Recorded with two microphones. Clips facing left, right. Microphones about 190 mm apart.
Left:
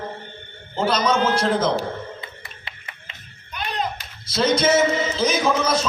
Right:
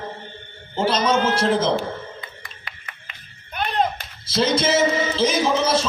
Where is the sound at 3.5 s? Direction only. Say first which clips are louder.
Right 5 dB; 55° right (ahead or behind).